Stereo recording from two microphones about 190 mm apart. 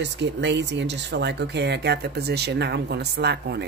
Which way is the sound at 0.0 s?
65° right (ahead or behind).